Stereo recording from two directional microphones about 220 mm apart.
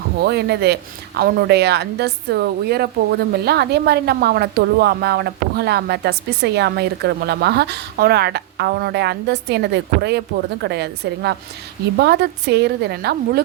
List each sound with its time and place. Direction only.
0.2 s speech: 50° right (ahead or behind)